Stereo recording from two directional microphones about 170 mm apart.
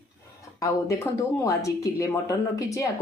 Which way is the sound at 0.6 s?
20° left (ahead or behind).